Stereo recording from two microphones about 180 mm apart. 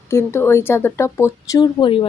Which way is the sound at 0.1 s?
15° left (ahead or behind).